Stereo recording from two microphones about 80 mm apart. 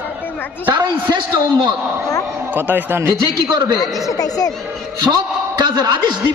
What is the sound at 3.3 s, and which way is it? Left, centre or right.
Speech, right.